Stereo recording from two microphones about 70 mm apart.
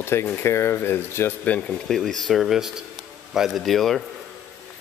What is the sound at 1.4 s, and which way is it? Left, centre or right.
Speech, left.